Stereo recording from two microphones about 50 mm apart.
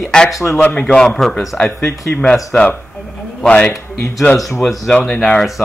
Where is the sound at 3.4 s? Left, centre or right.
Left.